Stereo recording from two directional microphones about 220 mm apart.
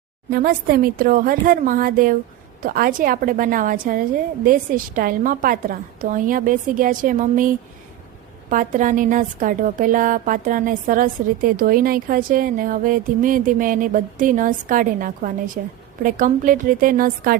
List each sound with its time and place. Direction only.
0.3 s a woman's voice: 40° right (ahead or behind)